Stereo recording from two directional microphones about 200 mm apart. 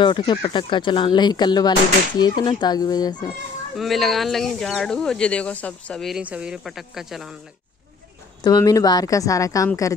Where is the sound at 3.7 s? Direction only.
Centre (ahead or behind).